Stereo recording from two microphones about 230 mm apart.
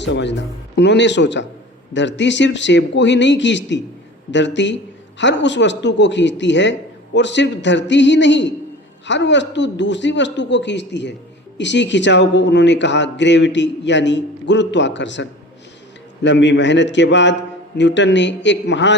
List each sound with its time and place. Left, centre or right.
0.0 s a man's voice: left